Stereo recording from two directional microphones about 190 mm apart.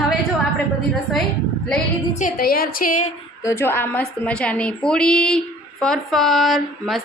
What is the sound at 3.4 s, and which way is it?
A woman's voice, 10° left (ahead or behind).